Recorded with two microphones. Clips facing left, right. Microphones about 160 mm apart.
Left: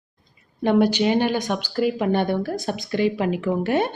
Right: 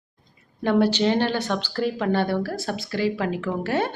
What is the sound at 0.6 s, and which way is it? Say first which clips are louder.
Speech: left 2 dB; 15° left (ahead or behind).